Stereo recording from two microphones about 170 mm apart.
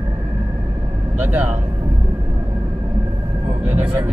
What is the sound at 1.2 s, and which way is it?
Speech, 10° right (ahead or behind).